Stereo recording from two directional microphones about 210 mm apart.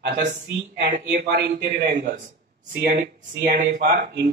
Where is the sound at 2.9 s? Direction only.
40° right (ahead or behind).